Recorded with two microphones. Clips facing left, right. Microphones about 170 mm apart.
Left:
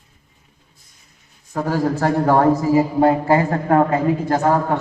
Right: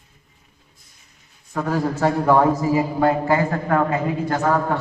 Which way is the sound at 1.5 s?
40° left (ahead or behind).